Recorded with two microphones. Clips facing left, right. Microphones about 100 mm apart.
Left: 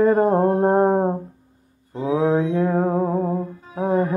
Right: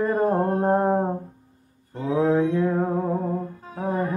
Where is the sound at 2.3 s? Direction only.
25° left (ahead or behind).